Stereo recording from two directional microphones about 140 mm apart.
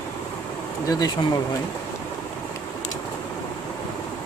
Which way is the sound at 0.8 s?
25° left (ahead or behind).